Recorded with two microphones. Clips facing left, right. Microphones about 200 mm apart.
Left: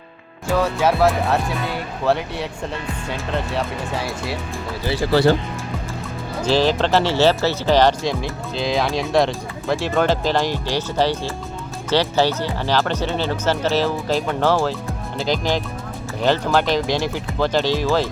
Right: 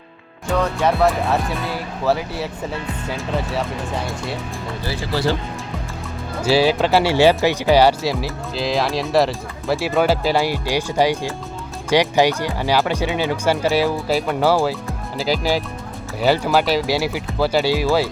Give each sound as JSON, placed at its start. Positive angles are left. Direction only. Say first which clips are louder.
{"t": 0.5, "sound": "speech", "louder": "even", "side_deg": 5}
{"t": 5.1, "sound": "speech", "louder": "left 5 dB", "side_deg": 60}
{"t": 6.4, "sound": "speech", "louder": "right 2 dB", "side_deg": -10}